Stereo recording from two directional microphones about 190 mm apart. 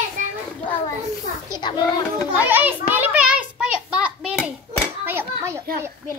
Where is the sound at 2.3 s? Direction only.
10° right (ahead or behind).